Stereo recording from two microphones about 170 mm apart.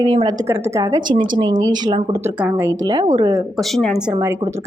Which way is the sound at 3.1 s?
20° right (ahead or behind).